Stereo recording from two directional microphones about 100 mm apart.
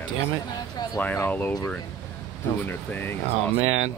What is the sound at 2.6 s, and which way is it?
Speech, 20° left (ahead or behind).